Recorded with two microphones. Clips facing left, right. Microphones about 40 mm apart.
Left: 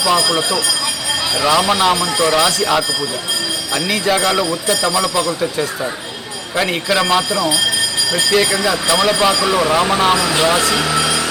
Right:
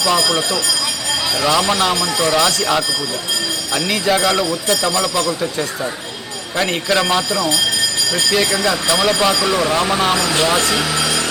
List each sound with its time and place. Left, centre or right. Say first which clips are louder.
0.0 s speech: left 1 dB; centre
3.8 s speech: even; centre